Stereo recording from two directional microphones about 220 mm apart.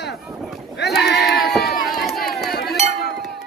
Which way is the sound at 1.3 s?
Centre (ahead or behind).